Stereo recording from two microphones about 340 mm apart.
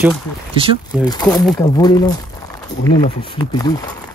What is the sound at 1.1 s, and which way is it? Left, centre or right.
Speech, centre.